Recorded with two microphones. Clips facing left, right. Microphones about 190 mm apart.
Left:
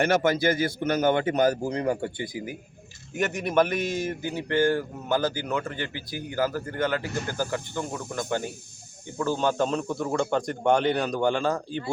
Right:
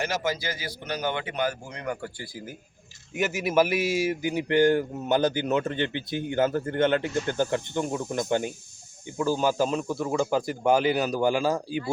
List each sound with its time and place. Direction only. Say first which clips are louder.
0.0 s a man's voice: left 7 dB; 55° left (ahead or behind); by 2.6 s 15° left (ahead or behind)
3.2 s speech: even; 5° right (ahead or behind)